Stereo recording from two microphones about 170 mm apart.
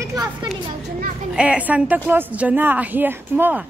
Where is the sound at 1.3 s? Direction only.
5° right (ahead or behind).